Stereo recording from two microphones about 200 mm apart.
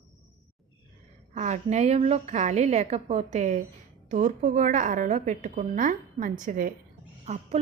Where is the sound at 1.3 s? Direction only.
35° right (ahead or behind).